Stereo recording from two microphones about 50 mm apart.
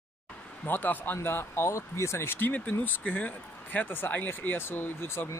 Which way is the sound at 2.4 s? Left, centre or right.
Left.